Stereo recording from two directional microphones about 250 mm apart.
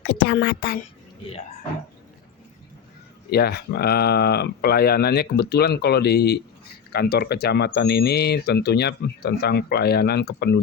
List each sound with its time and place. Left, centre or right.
0.0 s a woman's voice: left
3.2 s speech: left